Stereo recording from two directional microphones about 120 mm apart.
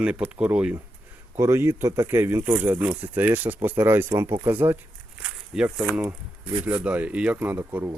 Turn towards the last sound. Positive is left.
turn(degrees=-15)  # may be behind; listen again after turning